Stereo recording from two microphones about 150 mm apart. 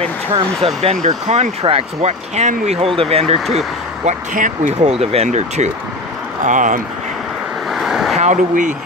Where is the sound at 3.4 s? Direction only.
Centre (ahead or behind).